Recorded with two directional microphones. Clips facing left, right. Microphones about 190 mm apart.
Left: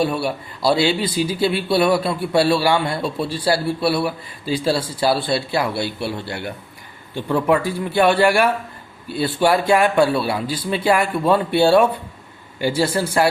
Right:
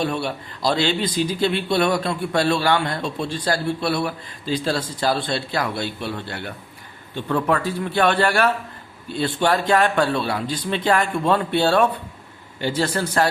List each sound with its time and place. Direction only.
0.0 s a man's voice: 10° left (ahead or behind)